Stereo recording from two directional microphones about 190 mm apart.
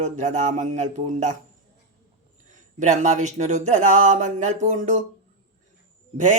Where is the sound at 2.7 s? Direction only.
40° right (ahead or behind).